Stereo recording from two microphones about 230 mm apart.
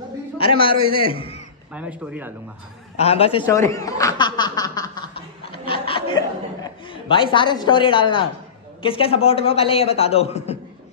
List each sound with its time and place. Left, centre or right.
0.4 s a man's voice: left
1.7 s speech: centre
3.0 s a man's voice: left